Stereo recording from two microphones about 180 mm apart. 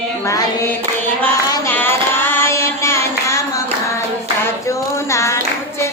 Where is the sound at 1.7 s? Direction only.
10° left (ahead or behind).